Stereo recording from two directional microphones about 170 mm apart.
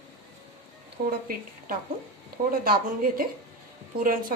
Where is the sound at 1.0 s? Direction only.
60° right (ahead or behind).